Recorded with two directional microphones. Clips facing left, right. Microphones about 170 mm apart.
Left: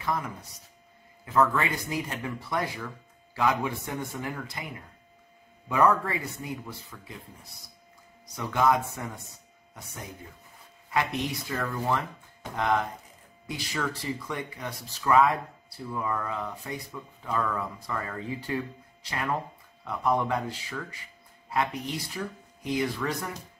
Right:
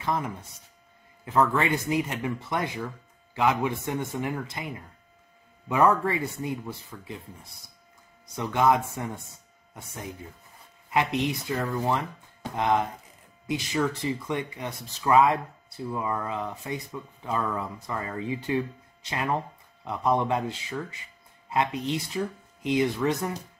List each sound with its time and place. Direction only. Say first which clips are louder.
0.0 s speech: right 2 dB; 25° right (ahead or behind)
5.7 s speech: right 2 dB; 25° right (ahead or behind)
8.4 s speech: right 2 dB; 25° right (ahead or behind)
10.9 s speech: right 3 dB; 20° right (ahead or behind)